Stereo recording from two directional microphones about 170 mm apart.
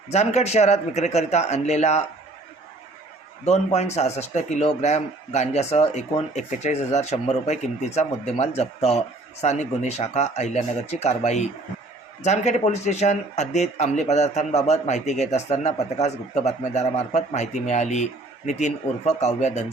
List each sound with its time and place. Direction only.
0.1 s speech: 40° left (ahead or behind)
3.4 s speech: 40° left (ahead or behind)